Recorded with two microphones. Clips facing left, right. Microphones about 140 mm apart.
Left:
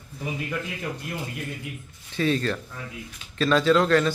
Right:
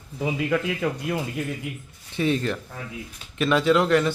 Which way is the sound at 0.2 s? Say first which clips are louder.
Right 7 dB; 90° right.